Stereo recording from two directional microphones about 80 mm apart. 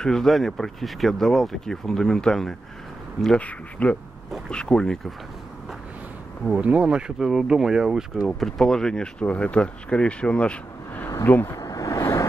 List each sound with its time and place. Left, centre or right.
0.0 s speech: centre
3.3 s speech: centre
6.4 s speech: centre
8.3 s speech: centre
11.2 s speech: left
11.5 s vehicle: left